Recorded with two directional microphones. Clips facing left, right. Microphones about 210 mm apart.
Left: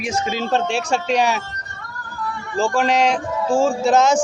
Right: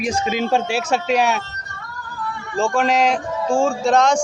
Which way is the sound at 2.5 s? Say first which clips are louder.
Even; centre (ahead or behind).